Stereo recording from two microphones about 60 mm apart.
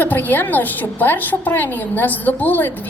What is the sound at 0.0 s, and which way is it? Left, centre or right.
A woman's voice, left.